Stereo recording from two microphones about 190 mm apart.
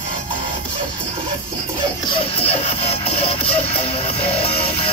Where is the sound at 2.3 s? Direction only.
30° left (ahead or behind).